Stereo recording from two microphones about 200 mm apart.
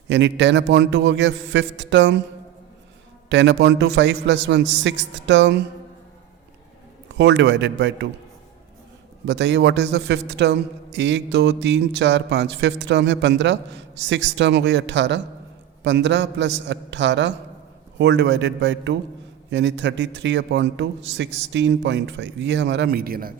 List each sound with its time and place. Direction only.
0.1 s a man's voice: 65° right (ahead or behind)
3.2 s a man's voice: 65° right (ahead or behind)
7.2 s a man's voice: 60° right (ahead or behind)
9.2 s a man's voice: 60° right (ahead or behind)